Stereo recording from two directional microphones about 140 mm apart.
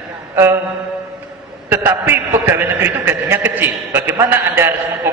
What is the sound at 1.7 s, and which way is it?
A man's voice, 15° right (ahead or behind).